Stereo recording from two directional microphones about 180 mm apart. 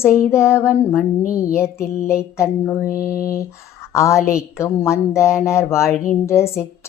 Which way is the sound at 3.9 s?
15° left (ahead or behind).